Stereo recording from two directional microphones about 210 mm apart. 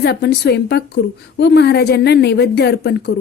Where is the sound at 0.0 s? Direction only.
50° left (ahead or behind).